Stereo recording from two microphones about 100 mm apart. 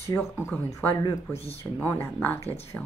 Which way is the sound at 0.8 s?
15° left (ahead or behind).